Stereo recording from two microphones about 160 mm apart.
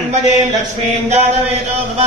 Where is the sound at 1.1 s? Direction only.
40° right (ahead or behind).